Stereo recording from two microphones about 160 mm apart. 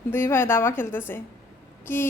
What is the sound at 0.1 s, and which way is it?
Speech, 15° left (ahead or behind).